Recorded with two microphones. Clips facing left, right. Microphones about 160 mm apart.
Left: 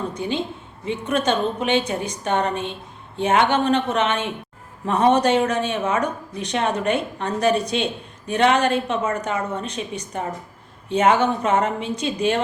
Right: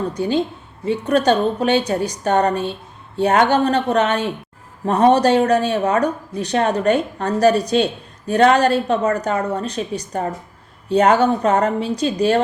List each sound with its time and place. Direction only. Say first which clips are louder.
0.1 s speech: right 6 dB; 40° right (ahead or behind)